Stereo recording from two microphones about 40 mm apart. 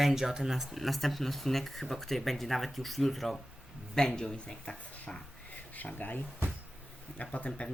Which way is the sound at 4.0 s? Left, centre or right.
Centre.